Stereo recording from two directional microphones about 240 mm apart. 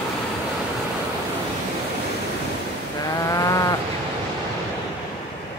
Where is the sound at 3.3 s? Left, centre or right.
Centre.